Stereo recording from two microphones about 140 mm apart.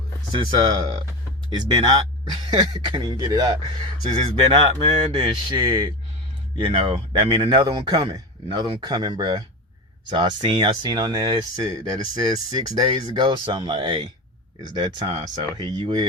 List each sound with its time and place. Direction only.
0.3 s speech: 35° right (ahead or behind)